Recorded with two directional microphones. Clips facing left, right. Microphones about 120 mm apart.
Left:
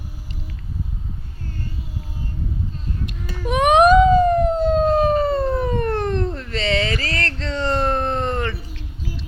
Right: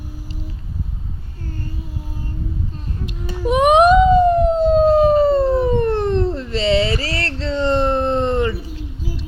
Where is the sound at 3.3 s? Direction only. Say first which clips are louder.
Right 2 dB; 25° right (ahead or behind).